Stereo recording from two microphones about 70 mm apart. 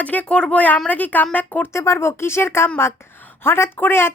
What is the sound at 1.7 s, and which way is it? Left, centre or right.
A woman's voice, left.